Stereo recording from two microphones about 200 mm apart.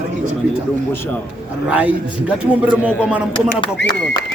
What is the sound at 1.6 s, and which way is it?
A man's voice, 5° right (ahead or behind).